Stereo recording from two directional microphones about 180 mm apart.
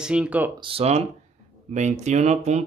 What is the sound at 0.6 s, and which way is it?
Speech, 35° right (ahead or behind).